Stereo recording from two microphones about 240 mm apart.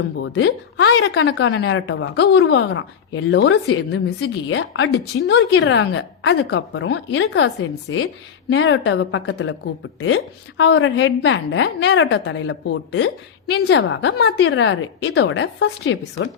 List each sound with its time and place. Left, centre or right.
0.2 s speech: left
10.6 s speech: left